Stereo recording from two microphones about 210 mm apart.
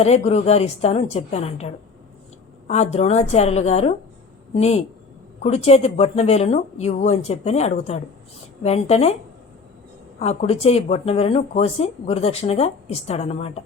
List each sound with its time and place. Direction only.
0.0 s speech: 30° left (ahead or behind)
2.9 s speech: 30° left (ahead or behind)
10.2 s speech: 30° left (ahead or behind)